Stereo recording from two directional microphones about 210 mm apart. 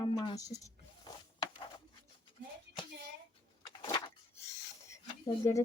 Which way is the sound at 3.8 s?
20° left (ahead or behind).